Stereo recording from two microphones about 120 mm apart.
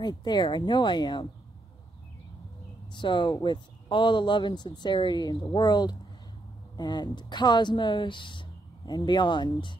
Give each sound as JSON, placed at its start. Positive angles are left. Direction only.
{"t": 0.0, "sound": "speech", "side_deg": 35}
{"t": 3.0, "sound": "speech", "side_deg": 40}
{"t": 3.3, "sound": "speech", "side_deg": 30}
{"t": 3.9, "sound": "speech", "side_deg": 40}